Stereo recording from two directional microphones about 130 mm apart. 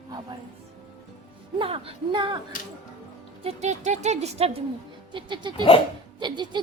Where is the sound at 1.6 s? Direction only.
45° right (ahead or behind).